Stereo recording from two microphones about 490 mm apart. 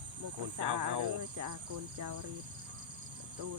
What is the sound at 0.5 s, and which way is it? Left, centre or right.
Speech, right.